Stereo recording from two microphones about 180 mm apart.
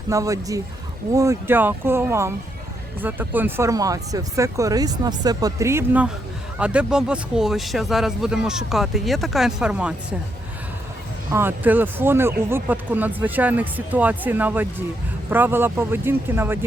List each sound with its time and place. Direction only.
0.1 s speech: 20° right (ahead or behind)
11.3 s speech: 15° right (ahead or behind)